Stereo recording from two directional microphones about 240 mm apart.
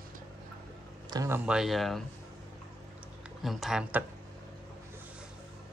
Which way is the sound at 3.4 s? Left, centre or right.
Centre.